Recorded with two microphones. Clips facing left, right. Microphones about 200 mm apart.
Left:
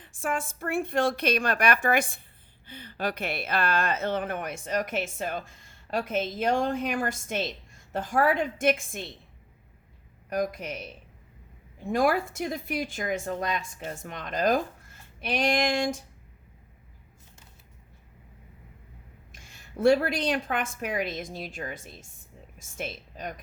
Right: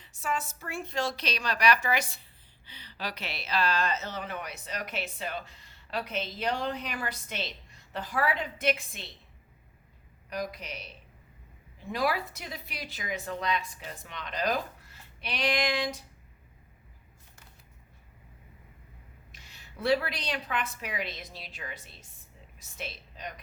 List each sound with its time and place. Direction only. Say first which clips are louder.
0.0 s speech: left 3 dB; 50° left (ahead or behind)
10.2 s speech: left 7 dB; 50° left (ahead or behind)
19.3 s a woman's voice: left 8 dB; 50° left (ahead or behind)